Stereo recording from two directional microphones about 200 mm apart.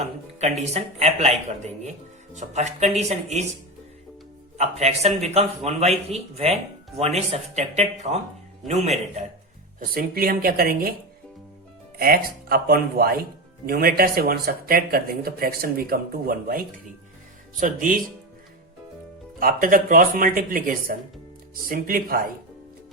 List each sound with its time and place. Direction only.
0.0 s a sound: 35° right (ahead or behind)
0.6 s speech: 30° right (ahead or behind)
4.5 s speech: 35° right (ahead or behind)
9.9 s speech: 45° right (ahead or behind)
11.9 s speech: 45° right (ahead or behind)
19.4 s speech: 45° right (ahead or behind)